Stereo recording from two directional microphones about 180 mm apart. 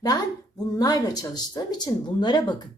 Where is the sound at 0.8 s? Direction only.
20° left (ahead or behind).